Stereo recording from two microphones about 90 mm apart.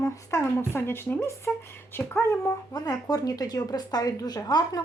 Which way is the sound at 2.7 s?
45° left (ahead or behind).